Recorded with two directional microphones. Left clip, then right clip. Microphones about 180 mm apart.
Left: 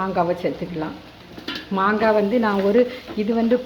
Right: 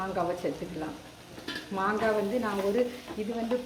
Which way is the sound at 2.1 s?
35° left (ahead or behind).